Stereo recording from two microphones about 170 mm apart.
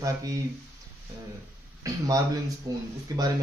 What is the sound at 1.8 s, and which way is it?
A man's voice, 20° right (ahead or behind).